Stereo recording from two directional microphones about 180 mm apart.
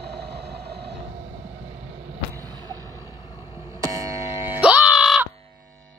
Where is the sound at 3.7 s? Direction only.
20° right (ahead or behind).